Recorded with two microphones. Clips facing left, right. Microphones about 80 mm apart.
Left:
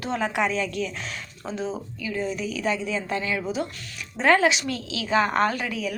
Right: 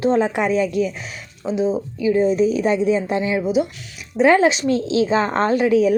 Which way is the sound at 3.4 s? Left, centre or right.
Centre.